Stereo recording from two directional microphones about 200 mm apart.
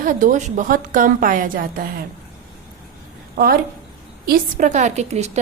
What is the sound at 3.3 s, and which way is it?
A woman's voice, 50° right (ahead or behind).